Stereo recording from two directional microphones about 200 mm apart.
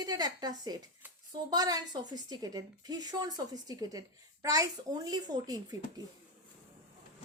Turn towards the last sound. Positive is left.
turn(degrees=-20)  # may be behind; listen again after turning